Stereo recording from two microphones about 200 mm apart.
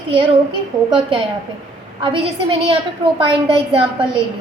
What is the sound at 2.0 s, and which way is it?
A woman's voice, 25° right (ahead or behind).